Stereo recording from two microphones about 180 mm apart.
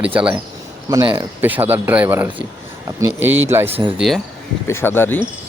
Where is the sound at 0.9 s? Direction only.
20° right (ahead or behind).